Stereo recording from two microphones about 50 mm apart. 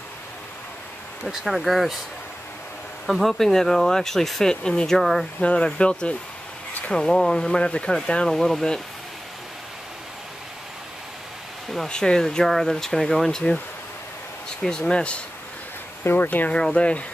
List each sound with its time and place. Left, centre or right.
1.3 s speech: centre
3.1 s speech: centre
5.4 s speech: left
8.4 s speech: centre
11.9 s speech: centre
14.6 s speech: centre
16.0 s speech: left
16.3 s speech: left
16.7 s speech: left